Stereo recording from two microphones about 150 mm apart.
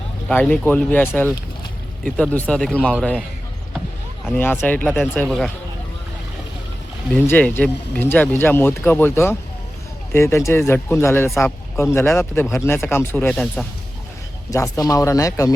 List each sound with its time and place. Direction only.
0.3 s a man's voice: 5° left (ahead or behind)
4.3 s speech: 15° left (ahead or behind)
7.3 s speech: 10° left (ahead or behind)
14.5 s speech: 20° left (ahead or behind)